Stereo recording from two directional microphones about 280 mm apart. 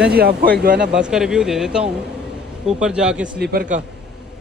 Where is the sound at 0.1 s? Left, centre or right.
Right.